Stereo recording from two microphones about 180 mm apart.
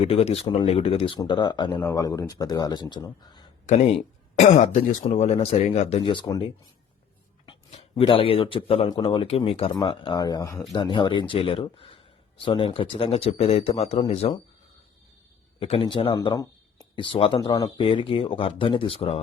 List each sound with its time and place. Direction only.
0.0 s speech: 35° left (ahead or behind)
4.4 s speech: 40° left (ahead or behind)
15.6 s speech: 30° left (ahead or behind)